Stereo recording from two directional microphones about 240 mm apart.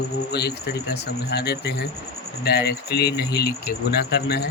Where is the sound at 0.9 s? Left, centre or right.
Left.